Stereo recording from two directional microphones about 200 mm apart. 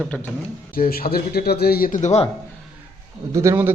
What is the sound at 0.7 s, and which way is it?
Speech, 45° left (ahead or behind).